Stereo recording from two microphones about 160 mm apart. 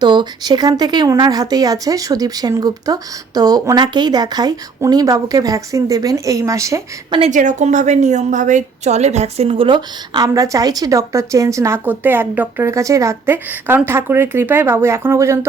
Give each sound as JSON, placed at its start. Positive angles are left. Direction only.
{"t": 0.0, "sound": "a woman's voice", "side_deg": -30}
{"t": 7.2, "sound": "a woman's voice", "side_deg": -50}